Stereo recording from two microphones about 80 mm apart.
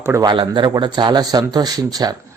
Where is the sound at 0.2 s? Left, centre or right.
Right.